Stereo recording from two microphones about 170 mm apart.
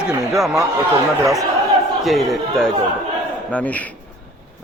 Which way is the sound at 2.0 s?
Centre (ahead or behind).